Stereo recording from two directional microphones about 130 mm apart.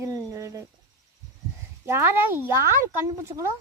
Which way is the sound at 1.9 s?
15° right (ahead or behind).